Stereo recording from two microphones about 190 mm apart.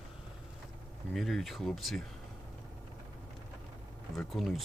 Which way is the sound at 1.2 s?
Centre (ahead or behind).